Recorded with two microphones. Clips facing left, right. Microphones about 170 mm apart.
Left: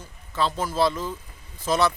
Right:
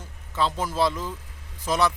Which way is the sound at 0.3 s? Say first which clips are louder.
Left 1 dB; 15° right (ahead or behind).